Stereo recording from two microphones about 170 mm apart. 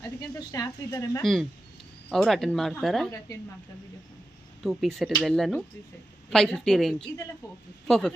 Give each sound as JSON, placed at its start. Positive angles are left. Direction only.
{"t": 0.0, "sound": "a woman's voice", "side_deg": 20}
{"t": 1.2, "sound": "speech", "side_deg": 0}
{"t": 4.6, "sound": "speech", "side_deg": 0}